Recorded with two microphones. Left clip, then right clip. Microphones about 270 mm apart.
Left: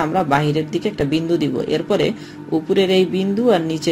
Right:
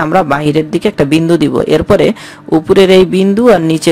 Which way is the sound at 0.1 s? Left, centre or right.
Right.